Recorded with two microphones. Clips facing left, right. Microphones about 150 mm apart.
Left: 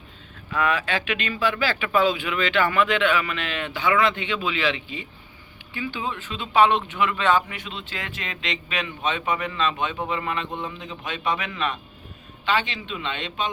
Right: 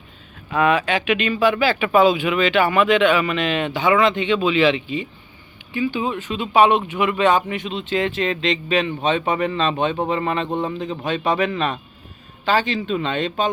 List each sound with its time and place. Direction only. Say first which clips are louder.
0.5 s speech: right 6 dB; 20° right (ahead or behind); by 13.5 s 40° right (ahead or behind)